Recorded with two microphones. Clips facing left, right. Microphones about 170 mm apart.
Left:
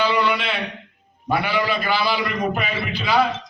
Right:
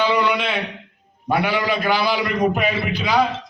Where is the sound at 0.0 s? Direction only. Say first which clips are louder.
Right 1 dB; 15° right (ahead or behind).